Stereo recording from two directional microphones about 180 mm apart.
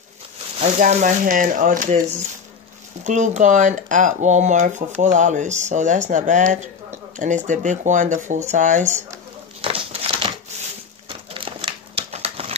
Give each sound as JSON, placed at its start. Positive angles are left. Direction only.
{"t": 0.6, "sound": "speech", "side_deg": -45}
{"t": 9.6, "sound": "a sound", "side_deg": -30}
{"t": 11.3, "sound": "crumpling", "side_deg": -30}